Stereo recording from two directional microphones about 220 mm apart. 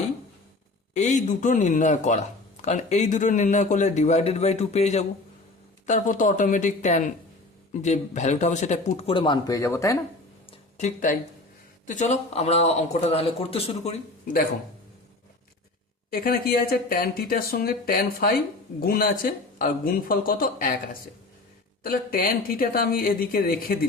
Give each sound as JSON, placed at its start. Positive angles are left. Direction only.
{"t": 0.9, "sound": "speech", "side_deg": 35}
{"t": 10.8, "sound": "a man's voice", "side_deg": 35}
{"t": 16.0, "sound": "speech", "side_deg": 40}
{"t": 21.8, "sound": "speech", "side_deg": 40}